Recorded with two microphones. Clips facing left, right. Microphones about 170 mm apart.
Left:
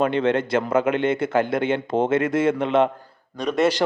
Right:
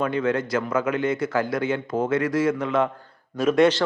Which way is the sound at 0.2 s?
30° left (ahead or behind).